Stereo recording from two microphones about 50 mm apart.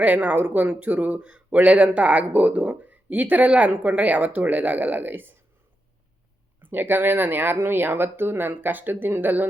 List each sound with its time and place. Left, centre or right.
0.0 s speech: right
6.6 s speech: right